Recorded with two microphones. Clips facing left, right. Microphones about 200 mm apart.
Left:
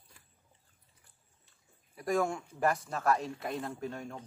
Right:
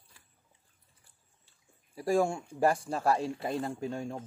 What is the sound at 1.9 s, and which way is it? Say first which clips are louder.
Speech: right 3 dB; 30° right (ahead or behind).